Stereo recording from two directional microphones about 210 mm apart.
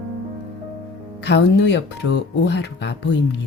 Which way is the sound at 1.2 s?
55° left (ahead or behind).